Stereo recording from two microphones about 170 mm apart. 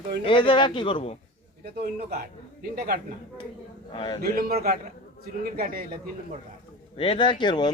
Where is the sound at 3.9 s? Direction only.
30° left (ahead or behind).